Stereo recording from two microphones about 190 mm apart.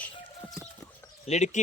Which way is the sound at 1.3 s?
35° left (ahead or behind).